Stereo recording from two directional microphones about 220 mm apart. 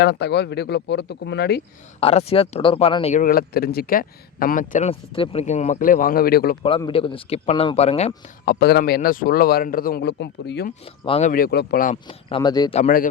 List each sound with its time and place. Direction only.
0.0 s a man's voice: 50° left (ahead or behind)
2.0 s speech: 25° left (ahead or behind); by 6.6 s 45° left (ahead or behind)
6.6 s speech: 20° left (ahead or behind)
8.4 s a man's voice: 50° left (ahead or behind)
11.0 s speech: 25° left (ahead or behind)
11.3 s speech: 40° left (ahead or behind)
12.0 s speech: 20° left (ahead or behind)
12.8 s speech: 40° left (ahead or behind)